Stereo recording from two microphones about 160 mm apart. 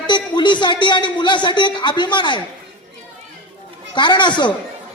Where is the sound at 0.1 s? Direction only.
30° left (ahead or behind).